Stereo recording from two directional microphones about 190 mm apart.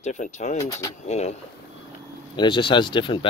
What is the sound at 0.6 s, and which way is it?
Speech, 20° left (ahead or behind).